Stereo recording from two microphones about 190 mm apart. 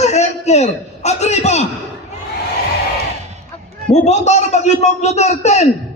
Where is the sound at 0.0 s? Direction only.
35° left (ahead or behind).